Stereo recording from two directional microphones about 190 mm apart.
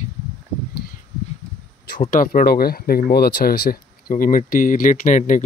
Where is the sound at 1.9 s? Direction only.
45° left (ahead or behind).